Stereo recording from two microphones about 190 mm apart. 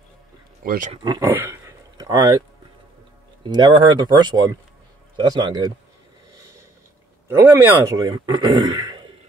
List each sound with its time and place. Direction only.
0.7 s speech: 45° right (ahead or behind)
1.0 s speech: 25° right (ahead or behind)
1.3 s a sound: 15° right (ahead or behind)
3.4 s speech: 25° right (ahead or behind)
7.2 s speech: 10° right (ahead or behind)